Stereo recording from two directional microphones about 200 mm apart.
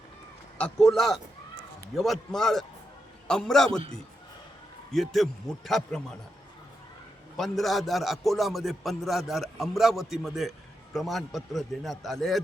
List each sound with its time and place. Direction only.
0.6 s speech: centre (ahead or behind)
4.9 s speech: centre (ahead or behind)
7.3 s speech: centre (ahead or behind)